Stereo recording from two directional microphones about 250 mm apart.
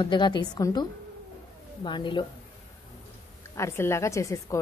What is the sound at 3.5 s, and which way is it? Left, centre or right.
A woman's voice, centre.